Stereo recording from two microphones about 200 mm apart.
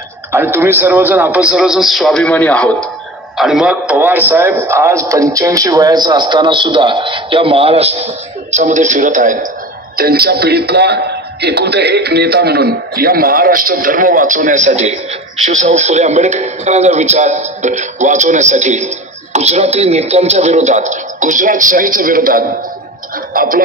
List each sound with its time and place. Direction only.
0.3 s a man's voice: 10° right (ahead or behind); by 23.6 s 45° right (ahead or behind)